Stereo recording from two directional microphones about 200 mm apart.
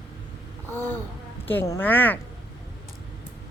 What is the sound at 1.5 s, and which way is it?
Speech, 15° left (ahead or behind).